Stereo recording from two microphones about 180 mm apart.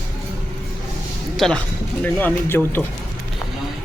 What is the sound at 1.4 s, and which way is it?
Speech, 5° left (ahead or behind).